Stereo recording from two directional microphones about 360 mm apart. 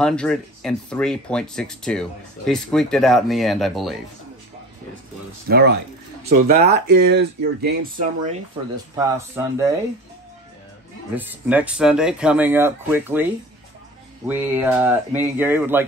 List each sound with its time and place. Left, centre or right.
0.0 s speech: centre
5.5 s speech: right
8.9 s speech: centre
11.1 s speech: centre